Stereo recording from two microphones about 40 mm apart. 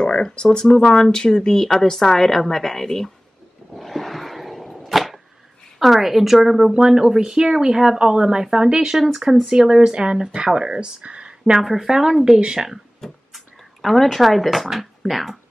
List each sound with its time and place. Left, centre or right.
0.0 s a woman's voice: centre
3.7 s wild animals: centre
4.8 s arrow: centre
5.8 s speech: centre
6.7 s speech: centre
8.0 s speech: centre
8.9 s speech: centre
11.0 s a sound: right
11.6 s speech: centre